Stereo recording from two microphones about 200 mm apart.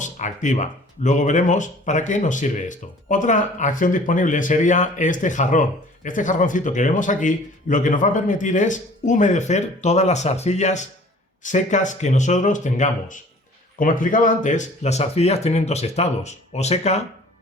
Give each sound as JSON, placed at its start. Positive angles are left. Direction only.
{"t": 0.0, "sound": "speech", "side_deg": 35}